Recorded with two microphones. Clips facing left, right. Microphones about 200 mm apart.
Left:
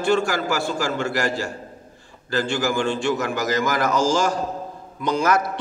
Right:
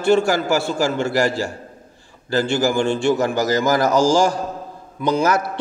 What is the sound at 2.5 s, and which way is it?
A man's voice, 30° right (ahead or behind).